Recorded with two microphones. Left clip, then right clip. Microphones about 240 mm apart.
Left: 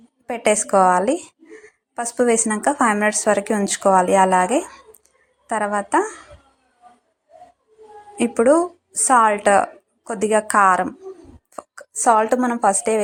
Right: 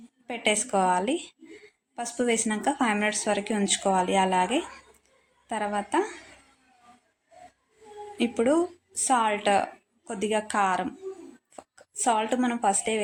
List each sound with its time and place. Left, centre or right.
0.3 s a woman's voice: left
8.4 s speech: centre